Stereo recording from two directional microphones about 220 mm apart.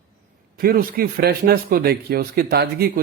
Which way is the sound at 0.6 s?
40° right (ahead or behind).